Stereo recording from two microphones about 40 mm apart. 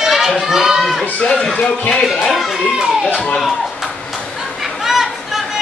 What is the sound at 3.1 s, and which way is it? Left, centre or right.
Speech, left.